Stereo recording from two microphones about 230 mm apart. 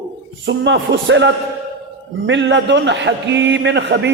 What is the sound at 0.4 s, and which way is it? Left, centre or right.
A man's voice, right.